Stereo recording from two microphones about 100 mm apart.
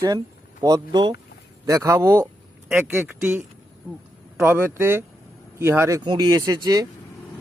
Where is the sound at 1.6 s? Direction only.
30° right (ahead or behind).